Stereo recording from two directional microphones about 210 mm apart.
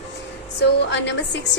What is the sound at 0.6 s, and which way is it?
Speech, 55° left (ahead or behind).